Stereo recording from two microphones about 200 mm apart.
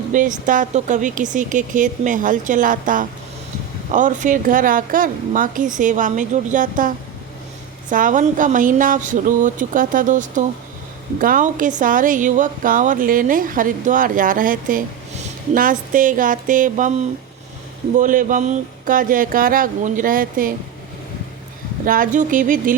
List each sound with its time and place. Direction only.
0.1 s speech: 40° right (ahead or behind)
21.8 s speech: 45° right (ahead or behind)